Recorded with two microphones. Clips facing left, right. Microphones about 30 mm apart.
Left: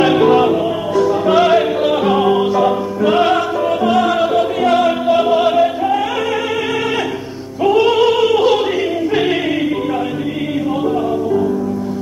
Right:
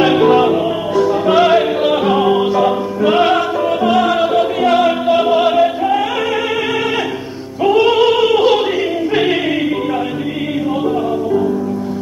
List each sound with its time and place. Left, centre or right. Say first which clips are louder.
0.0 s music: even; centre
7.6 s opera: right 1 dB; centre
9.1 s music: right 2 dB; centre